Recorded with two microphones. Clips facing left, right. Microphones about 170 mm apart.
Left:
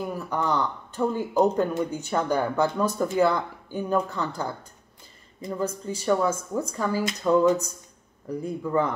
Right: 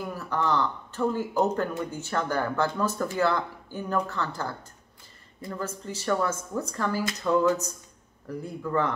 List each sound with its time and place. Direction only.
0.0 s speech: 15° left (ahead or behind)